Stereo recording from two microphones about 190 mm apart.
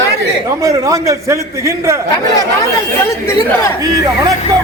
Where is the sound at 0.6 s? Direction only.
15° right (ahead or behind).